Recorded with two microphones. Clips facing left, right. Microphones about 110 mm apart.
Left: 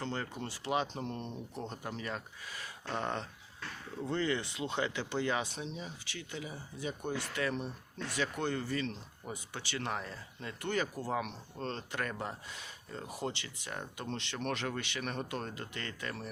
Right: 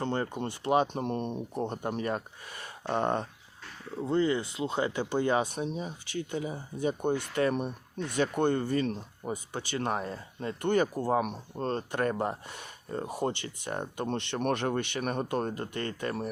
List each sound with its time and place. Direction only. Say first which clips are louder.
0.0 s speech: right 7 dB; 50° right (ahead or behind)
4.0 s speech: right 6 dB; 35° right (ahead or behind)
10.6 s speech: right 8 dB; 50° right (ahead or behind)